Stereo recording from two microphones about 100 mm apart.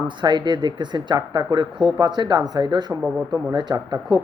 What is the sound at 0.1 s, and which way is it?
A man's voice, 50° right (ahead or behind).